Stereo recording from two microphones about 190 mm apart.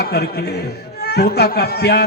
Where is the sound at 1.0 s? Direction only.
60° left (ahead or behind).